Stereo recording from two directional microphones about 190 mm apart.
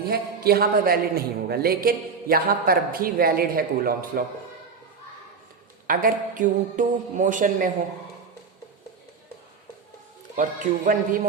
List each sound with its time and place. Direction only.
0.4 s a man's voice: 55° right (ahead or behind)
5.9 s a man's voice: 45° right (ahead or behind)
10.3 s a man's voice: 45° right (ahead or behind)